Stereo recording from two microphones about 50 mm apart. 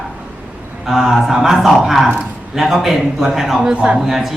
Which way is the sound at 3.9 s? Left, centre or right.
Centre.